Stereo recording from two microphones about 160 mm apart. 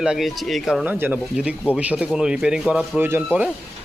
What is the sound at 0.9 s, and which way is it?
Speech, 10° right (ahead or behind).